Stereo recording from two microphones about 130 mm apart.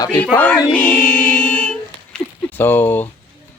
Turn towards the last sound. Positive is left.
turn(degrees=15)  # may be behind; listen again after turning